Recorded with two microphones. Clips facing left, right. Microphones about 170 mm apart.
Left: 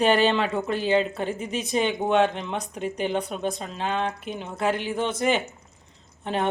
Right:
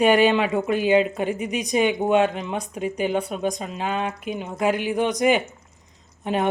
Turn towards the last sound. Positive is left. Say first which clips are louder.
# right 3 dB
turn(degrees=-10)  # may be behind; listen again after turning